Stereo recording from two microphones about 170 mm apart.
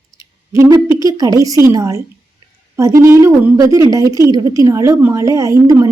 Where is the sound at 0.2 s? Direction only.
20° right (ahead or behind).